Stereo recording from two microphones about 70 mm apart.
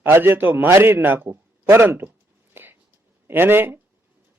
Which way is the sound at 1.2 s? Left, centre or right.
Right.